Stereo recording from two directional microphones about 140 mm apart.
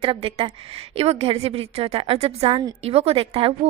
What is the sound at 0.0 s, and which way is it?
A woman's voice, 40° right (ahead or behind).